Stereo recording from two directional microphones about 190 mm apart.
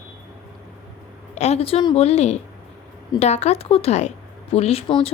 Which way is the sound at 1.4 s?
35° left (ahead or behind).